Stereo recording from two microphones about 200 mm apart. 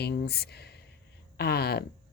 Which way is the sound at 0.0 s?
55° left (ahead or behind).